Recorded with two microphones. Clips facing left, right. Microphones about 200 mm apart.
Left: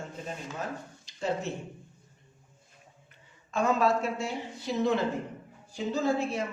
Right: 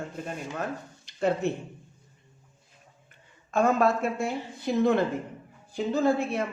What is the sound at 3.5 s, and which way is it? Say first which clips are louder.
A man's voice: right 3 dB; 55° right (ahead or behind).